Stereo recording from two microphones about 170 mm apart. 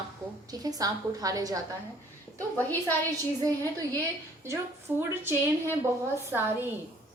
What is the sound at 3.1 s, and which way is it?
Speech, 20° right (ahead or behind).